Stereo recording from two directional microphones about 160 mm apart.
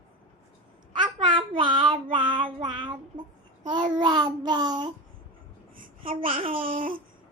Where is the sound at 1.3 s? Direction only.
30° right (ahead or behind).